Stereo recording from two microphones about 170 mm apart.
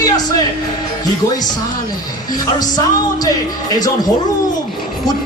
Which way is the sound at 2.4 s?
20° left (ahead or behind).